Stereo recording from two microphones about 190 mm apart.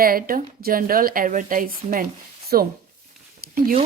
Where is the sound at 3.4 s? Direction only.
50° right (ahead or behind).